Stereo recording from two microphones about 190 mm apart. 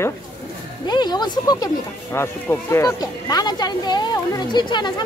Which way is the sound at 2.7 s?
20° left (ahead or behind).